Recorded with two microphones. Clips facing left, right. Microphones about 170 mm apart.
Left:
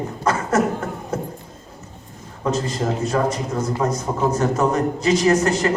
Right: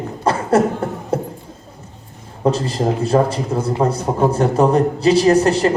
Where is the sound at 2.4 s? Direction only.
30° right (ahead or behind).